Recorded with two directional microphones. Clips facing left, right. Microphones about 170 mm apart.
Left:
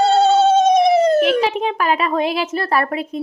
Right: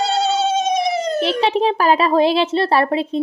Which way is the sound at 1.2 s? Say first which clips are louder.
Even; 30° right (ahead or behind).